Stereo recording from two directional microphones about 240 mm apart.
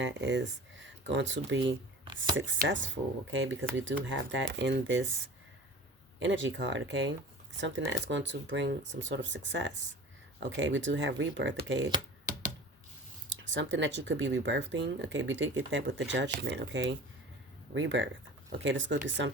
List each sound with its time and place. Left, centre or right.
0.0 s speech: right
6.1 s speech: right
13.5 s speech: right